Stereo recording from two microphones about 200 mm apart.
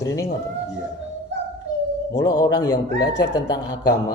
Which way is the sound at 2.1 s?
20° left (ahead or behind).